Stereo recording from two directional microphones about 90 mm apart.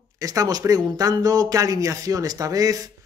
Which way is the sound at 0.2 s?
40° right (ahead or behind).